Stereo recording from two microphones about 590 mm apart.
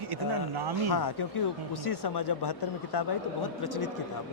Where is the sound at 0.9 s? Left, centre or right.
Left.